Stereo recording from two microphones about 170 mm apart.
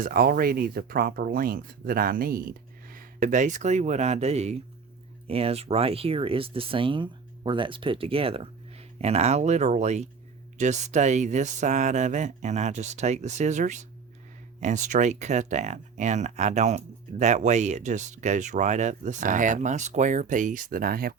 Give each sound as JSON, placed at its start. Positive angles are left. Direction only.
{"t": 0.0, "sound": "speech", "side_deg": -60}